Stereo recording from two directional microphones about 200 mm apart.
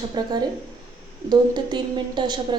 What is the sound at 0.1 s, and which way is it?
A woman's voice, 20° right (ahead or behind).